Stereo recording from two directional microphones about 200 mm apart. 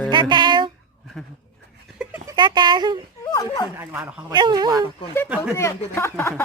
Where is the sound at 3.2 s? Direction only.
15° left (ahead or behind).